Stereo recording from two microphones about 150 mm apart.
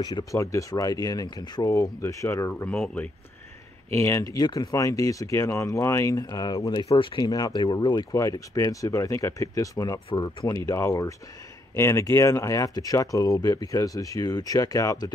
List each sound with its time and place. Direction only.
0.0 s speech: 25° left (ahead or behind)
2.7 s speech: 5° left (ahead or behind)
3.9 s speech: 20° left (ahead or behind)